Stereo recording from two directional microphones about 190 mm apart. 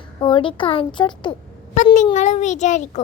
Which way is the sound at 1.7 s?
40° left (ahead or behind).